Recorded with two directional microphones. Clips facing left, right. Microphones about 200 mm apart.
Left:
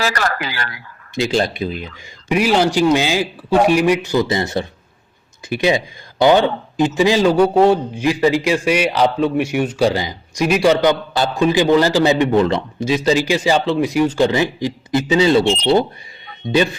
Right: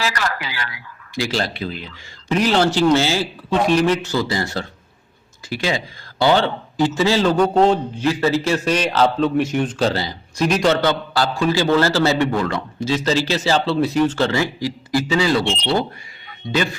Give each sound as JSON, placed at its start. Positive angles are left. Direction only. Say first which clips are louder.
{"t": 0.0, "sound": "speech", "louder": "left 3 dB", "side_deg": 45}
{"t": 1.1, "sound": "a man's voice", "louder": "left 5 dB", "side_deg": 20}
{"t": 15.4, "sound": "speech", "louder": "left 6 dB", "side_deg": 45}